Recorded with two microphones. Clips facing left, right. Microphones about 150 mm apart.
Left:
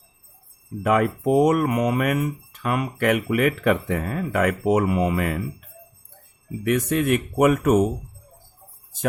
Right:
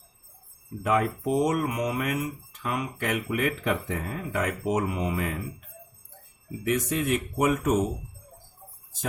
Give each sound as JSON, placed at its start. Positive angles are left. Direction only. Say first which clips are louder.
{"t": 0.9, "sound": "speech", "louder": "left 5 dB", "side_deg": 65}
{"t": 6.7, "sound": "speech", "louder": "left 5 dB", "side_deg": 60}